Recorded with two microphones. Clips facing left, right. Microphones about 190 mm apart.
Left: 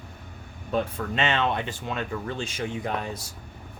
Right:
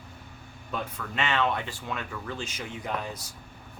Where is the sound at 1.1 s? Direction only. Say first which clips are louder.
Left 2 dB; 25° left (ahead or behind).